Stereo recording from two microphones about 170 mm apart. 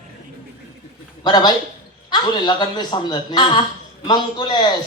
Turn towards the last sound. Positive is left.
turn(degrees=25)  # may be behind; listen again after turning